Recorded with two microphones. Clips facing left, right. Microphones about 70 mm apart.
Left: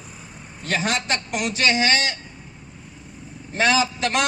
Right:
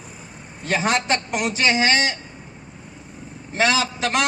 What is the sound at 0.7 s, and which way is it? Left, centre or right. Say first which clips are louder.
A man's voice: right 3 dB; right.